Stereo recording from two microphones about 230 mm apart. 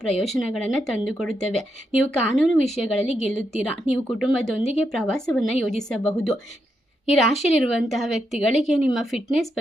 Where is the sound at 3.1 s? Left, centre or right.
Left.